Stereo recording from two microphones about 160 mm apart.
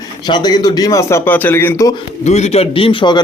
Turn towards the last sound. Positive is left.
turn(degrees=30)  # may be behind; listen again after turning